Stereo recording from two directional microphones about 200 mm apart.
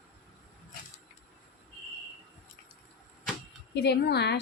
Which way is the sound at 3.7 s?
55° left (ahead or behind).